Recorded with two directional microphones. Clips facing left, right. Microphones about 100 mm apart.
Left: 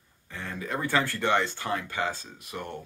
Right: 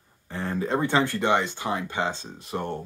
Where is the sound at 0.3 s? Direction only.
35° right (ahead or behind).